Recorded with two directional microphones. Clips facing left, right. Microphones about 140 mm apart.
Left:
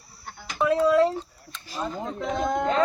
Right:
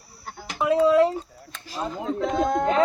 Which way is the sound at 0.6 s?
5° right (ahead or behind).